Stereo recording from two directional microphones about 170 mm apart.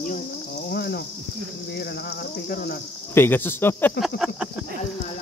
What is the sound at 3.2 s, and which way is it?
Speech, 10° left (ahead or behind).